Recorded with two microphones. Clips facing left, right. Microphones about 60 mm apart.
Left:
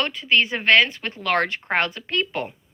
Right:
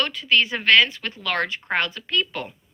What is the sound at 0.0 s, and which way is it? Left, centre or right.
A woman's voice, left.